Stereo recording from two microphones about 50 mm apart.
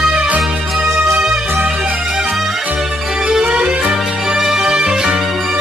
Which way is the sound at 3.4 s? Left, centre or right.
Right.